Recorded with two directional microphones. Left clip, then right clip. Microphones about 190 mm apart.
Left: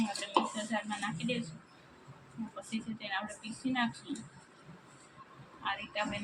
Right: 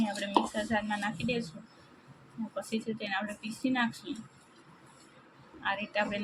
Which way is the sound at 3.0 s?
30° right (ahead or behind).